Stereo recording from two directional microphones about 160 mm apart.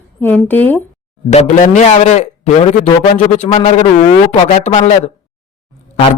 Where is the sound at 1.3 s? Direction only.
45° left (ahead or behind).